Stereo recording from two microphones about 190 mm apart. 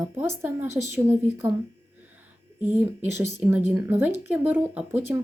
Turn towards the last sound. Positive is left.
turn(degrees=-10)  # may be behind; listen again after turning